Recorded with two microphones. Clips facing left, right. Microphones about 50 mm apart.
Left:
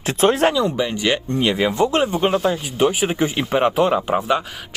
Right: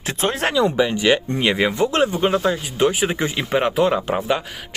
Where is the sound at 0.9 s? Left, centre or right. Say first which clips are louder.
Right 2 dB; right.